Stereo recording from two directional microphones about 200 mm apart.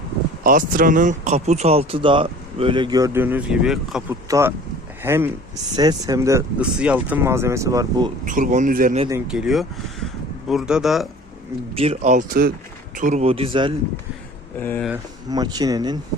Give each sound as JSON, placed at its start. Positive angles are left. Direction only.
{"t": 0.4, "sound": "speech", "side_deg": -40}
{"t": 4.1, "sound": "speech", "side_deg": -15}
{"t": 8.2, "sound": "speech", "side_deg": -40}
{"t": 9.2, "sound": "speech", "side_deg": -5}
{"t": 11.7, "sound": "speech", "side_deg": -30}
{"t": 14.6, "sound": "speech", "side_deg": 10}
{"t": 15.3, "sound": "speech", "side_deg": -20}